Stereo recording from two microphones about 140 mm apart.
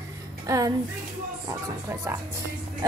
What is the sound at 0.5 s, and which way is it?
Speech, 25° right (ahead or behind).